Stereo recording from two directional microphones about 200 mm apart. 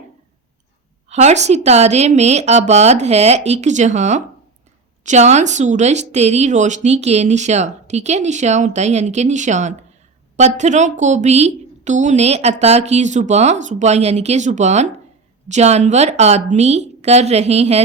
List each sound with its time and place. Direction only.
1.1 s speech: 35° right (ahead or behind)